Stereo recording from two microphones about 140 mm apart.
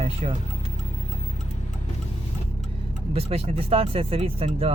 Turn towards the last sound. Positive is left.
turn(degrees=-45)  # may be behind; listen again after turning